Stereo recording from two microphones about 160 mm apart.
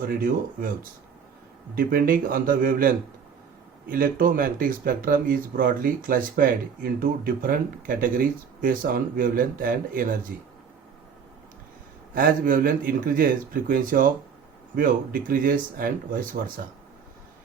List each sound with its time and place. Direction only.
0.0 s speech: 65° right (ahead or behind)
12.1 s speech: 60° right (ahead or behind)